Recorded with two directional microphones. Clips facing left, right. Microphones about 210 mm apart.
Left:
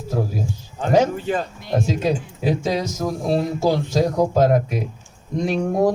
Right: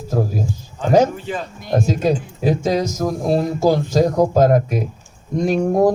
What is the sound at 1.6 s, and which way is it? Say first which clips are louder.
Speech: right 5 dB; 45° right (ahead or behind).